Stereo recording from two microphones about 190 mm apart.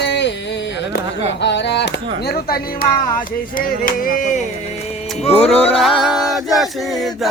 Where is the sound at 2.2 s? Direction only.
55° left (ahead or behind).